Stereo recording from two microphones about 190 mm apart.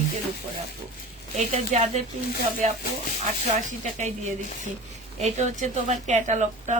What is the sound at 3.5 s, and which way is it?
Speech, 40° right (ahead or behind).